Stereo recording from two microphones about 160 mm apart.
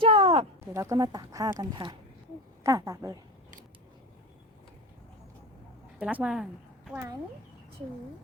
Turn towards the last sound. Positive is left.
turn(degrees=-20)  # may be behind; listen again after turning